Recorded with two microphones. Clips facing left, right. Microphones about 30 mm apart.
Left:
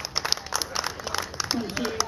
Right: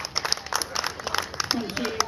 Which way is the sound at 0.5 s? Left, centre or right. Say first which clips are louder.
Right 1 dB; centre.